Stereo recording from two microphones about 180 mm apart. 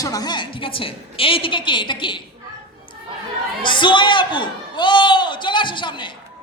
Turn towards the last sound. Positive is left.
turn(degrees=25)  # may be behind; listen again after turning